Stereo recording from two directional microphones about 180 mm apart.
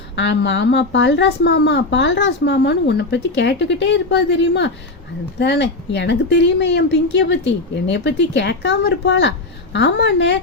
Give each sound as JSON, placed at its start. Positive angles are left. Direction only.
{"t": 0.2, "sound": "speech", "side_deg": 80}
{"t": 9.7, "sound": "a woman's voice", "side_deg": 80}